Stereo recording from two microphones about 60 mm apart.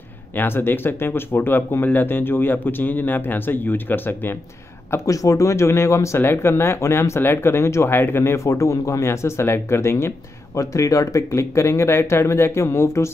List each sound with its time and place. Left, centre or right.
0.4 s speech: left
5.0 s speech: left
6.1 s speech: left